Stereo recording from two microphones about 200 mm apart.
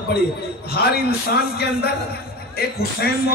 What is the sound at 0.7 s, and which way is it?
Speech, 50° left (ahead or behind).